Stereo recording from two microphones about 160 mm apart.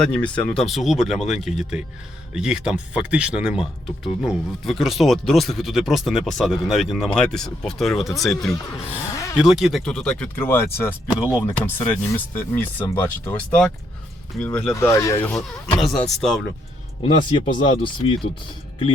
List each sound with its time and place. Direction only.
0.0 s speech: 5° left (ahead or behind)
9.1 s a sound: 20° left (ahead or behind)
9.4 s speech: 5° right (ahead or behind)
14.8 s speech: 20° left (ahead or behind)
15.4 s speech: centre (ahead or behind)
17.0 s speech: 35° left (ahead or behind)